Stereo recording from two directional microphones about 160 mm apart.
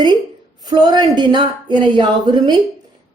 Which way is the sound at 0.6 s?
25° right (ahead or behind).